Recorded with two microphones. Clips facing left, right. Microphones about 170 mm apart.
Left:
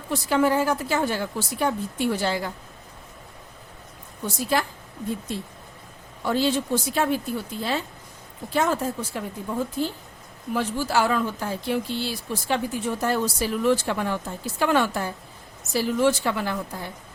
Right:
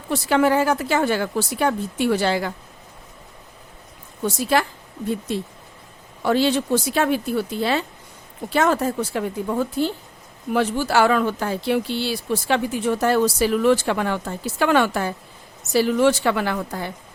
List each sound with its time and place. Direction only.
0.1 s speech: 80° right
4.4 s speech: 80° right
6.2 s speech: 80° right